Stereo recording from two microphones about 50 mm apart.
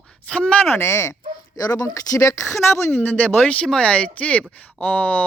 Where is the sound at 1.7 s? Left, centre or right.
Left.